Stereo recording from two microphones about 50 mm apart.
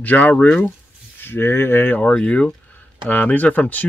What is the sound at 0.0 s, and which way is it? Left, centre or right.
Speech, left.